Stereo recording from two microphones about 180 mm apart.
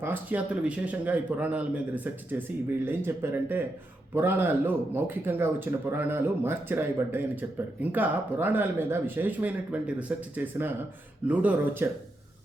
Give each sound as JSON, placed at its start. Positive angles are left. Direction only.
{"t": 0.0, "sound": "speech", "side_deg": -10}